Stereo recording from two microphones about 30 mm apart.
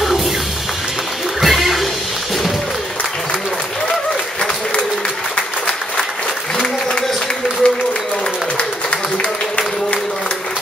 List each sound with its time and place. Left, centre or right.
0.0 s music: centre
1.4 s a sound: centre
7.6 s applause: left